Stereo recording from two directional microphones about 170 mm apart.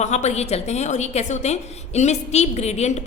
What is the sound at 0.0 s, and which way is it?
A woman's voice, 40° left (ahead or behind).